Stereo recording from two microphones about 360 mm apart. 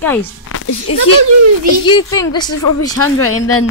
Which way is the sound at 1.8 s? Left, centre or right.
Centre.